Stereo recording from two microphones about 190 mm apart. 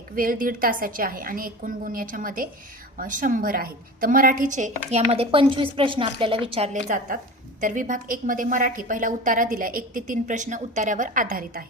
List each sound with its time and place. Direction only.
0.2 s a woman's voice: 45° right (ahead or behind)